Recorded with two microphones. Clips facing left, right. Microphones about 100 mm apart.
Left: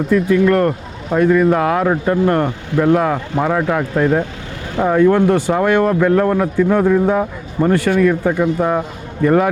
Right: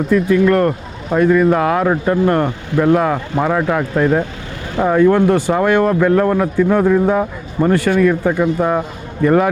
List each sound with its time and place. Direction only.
0.1 s speech: 25° right (ahead or behind)